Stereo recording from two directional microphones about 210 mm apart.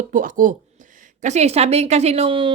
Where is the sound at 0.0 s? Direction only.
40° right (ahead or behind).